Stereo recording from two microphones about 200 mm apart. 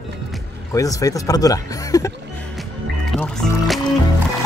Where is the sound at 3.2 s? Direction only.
5° left (ahead or behind).